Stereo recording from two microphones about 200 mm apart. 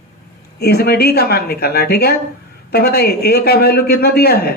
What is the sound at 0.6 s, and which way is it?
A man's voice, 55° left (ahead or behind).